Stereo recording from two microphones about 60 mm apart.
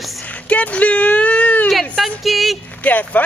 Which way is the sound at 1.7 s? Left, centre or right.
Centre.